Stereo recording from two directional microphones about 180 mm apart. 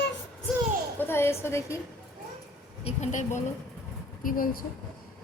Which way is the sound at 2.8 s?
40° left (ahead or behind).